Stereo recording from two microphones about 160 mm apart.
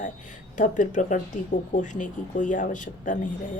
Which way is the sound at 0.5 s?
55° left (ahead or behind).